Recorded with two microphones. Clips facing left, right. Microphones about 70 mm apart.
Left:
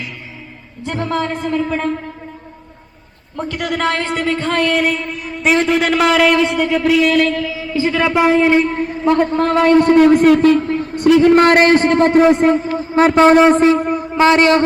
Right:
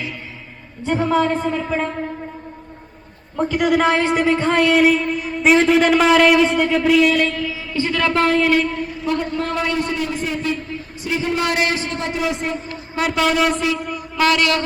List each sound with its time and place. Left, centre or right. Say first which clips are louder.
0.9 s a woman's voice: right 2 dB; centre
3.3 s a woman's voice: right 4 dB; centre; by 8.6 s left
8.6 s a man's voice: left 7 dB; left
14.2 s speech: left 6 dB; left